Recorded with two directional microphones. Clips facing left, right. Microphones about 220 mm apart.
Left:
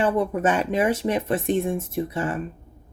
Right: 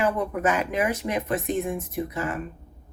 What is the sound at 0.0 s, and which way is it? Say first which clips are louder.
Speech: left 3 dB; 30° left (ahead or behind).